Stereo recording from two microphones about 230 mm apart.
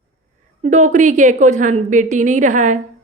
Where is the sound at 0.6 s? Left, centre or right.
Right.